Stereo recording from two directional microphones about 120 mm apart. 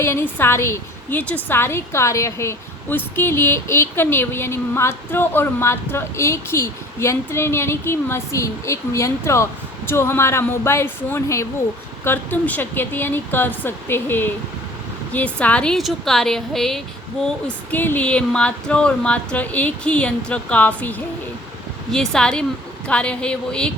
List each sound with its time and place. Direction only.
0.0 s a woman's voice: 20° left (ahead or behind); by 16.8 s 5° left (ahead or behind)
17.2 s speech: 15° left (ahead or behind)
21.9 s a woman's voice: 5° left (ahead or behind)